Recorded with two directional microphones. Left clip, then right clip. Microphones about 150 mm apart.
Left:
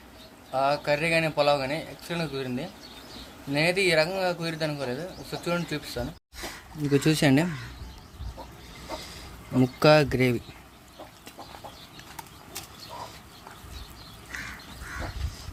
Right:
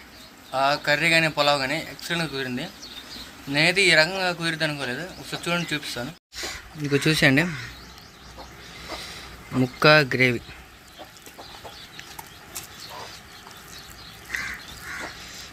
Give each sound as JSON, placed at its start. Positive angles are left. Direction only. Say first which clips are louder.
{"t": 0.5, "sound": "a man's voice", "louder": "right 3 dB", "side_deg": -5}
{"t": 9.6, "sound": "speech", "louder": "right 2 dB", "side_deg": 5}